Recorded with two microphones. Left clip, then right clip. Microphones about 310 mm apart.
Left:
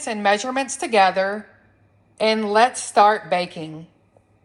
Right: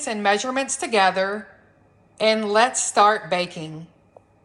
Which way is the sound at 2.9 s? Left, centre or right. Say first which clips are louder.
Left 2 dB; centre.